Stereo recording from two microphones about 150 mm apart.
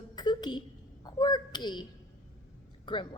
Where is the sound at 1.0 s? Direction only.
30° left (ahead or behind).